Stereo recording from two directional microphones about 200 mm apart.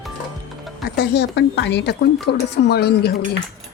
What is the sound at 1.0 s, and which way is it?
Speech, 55° left (ahead or behind).